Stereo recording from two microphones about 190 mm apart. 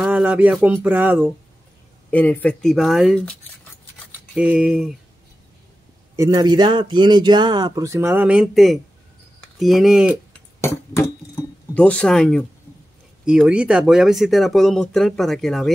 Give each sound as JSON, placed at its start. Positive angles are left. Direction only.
{"t": 0.0, "sound": "speech", "side_deg": -5}
{"t": 2.0, "sound": "speech", "side_deg": 10}
{"t": 4.4, "sound": "speech", "side_deg": -5}
{"t": 6.1, "sound": "speech", "side_deg": -20}
{"t": 10.6, "sound": "speech", "side_deg": 15}